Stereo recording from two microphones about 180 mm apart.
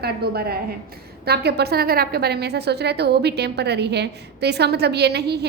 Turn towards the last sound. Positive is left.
turn(degrees=-65)  # may be behind; listen again after turning